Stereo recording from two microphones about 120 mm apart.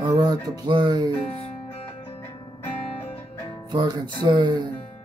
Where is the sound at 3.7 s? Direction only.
40° right (ahead or behind).